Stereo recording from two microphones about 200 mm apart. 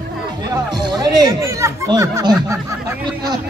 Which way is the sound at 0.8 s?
20° right (ahead or behind).